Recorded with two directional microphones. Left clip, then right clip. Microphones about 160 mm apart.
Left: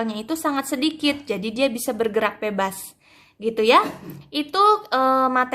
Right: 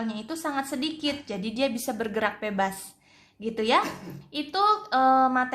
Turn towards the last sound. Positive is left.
turn(degrees=30)  # may be behind; listen again after turning